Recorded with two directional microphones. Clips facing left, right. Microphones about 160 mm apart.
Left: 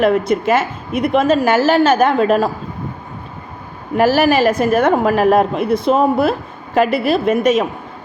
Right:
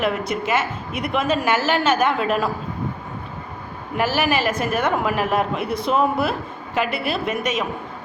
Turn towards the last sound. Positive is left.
turn(degrees=35)  # may be behind; listen again after turning